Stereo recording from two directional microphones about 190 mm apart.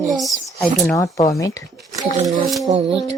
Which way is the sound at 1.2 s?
15° left (ahead or behind).